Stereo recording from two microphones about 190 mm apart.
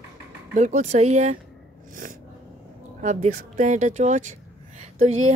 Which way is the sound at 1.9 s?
45° right (ahead or behind).